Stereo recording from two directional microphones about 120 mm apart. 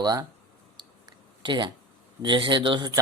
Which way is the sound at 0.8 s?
40° right (ahead or behind).